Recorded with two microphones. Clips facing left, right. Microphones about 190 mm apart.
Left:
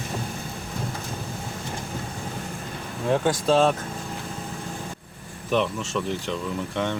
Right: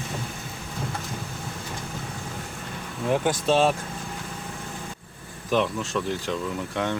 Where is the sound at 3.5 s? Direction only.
5° right (ahead or behind).